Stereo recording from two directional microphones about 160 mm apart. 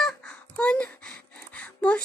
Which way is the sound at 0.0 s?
5° left (ahead or behind).